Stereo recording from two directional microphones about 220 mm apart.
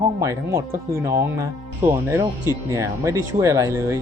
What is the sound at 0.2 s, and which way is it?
Speech, 10° right (ahead or behind).